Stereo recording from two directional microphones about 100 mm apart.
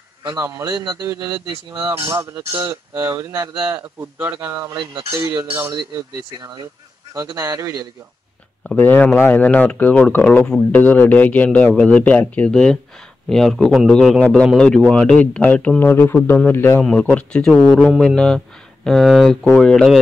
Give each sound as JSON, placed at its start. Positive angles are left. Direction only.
{"t": 0.4, "sound": "speech", "side_deg": -30}
{"t": 1.9, "sound": "speech", "side_deg": -30}
{"t": 4.0, "sound": "a man's voice", "side_deg": -20}
{"t": 7.3, "sound": "a man's voice", "side_deg": -30}
{"t": 8.7, "sound": "a man's voice", "side_deg": 20}
{"t": 17.1, "sound": "a man's voice", "side_deg": 10}
{"t": 17.7, "sound": "a man's voice", "side_deg": -5}